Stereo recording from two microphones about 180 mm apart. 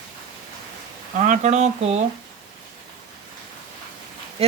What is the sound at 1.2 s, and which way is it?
Speech, 40° right (ahead or behind).